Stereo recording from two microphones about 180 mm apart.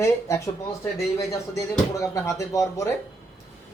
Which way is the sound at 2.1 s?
15° left (ahead or behind).